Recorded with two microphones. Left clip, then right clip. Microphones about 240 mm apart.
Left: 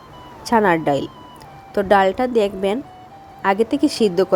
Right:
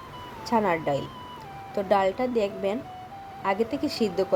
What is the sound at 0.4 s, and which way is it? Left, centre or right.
Speech, left.